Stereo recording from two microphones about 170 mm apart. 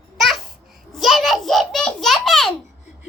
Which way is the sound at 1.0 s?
Centre (ahead or behind).